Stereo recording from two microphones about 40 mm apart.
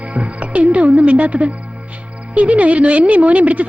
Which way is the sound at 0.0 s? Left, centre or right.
Right.